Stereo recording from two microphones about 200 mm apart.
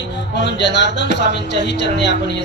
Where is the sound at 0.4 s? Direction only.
60° left (ahead or behind).